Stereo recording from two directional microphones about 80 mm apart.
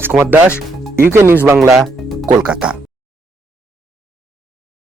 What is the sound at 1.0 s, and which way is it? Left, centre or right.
Speech, right.